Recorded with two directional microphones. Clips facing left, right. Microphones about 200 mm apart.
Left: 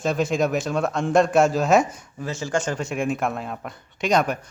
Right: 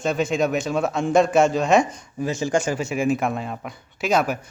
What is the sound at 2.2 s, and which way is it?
Speech, 15° right (ahead or behind).